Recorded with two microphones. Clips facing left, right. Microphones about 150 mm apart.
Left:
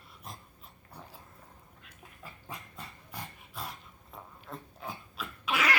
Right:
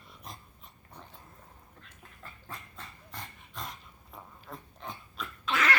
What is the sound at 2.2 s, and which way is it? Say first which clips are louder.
Dog: left 1 dB; 10° left (ahead or behind).